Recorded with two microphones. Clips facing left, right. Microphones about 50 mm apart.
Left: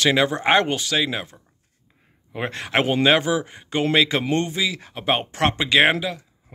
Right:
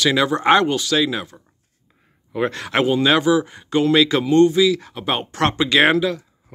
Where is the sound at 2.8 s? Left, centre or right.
Left.